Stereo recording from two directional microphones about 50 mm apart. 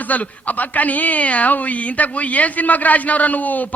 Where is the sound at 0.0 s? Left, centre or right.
Left.